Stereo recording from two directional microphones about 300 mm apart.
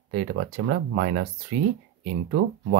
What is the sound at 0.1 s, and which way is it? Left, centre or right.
Speech, right.